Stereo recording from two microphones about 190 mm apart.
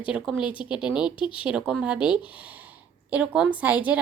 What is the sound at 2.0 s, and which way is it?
Speech, 25° left (ahead or behind).